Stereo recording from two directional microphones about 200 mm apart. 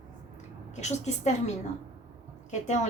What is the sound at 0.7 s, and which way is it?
Speech, 35° left (ahead or behind).